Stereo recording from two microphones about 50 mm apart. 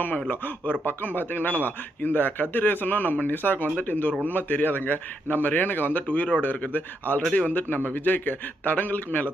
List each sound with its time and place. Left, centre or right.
0.3 s a man's voice: left